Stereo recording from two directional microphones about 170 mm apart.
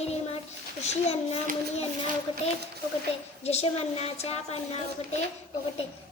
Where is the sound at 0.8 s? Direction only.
40° left (ahead or behind).